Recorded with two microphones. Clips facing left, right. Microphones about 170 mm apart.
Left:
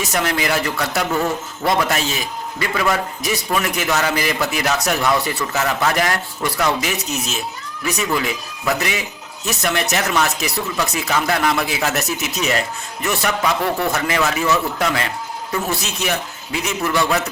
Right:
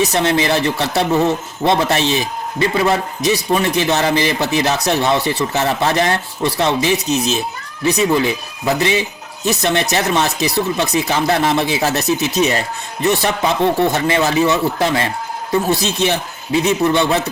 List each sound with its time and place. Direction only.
0.1 s a man's voice: 25° right (ahead or behind)
11.9 s a man's voice: 20° right (ahead or behind)
12.4 s a man's voice: 35° right (ahead or behind)